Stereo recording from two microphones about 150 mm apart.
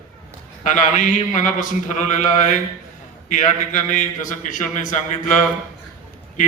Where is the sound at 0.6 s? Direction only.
60° left (ahead or behind).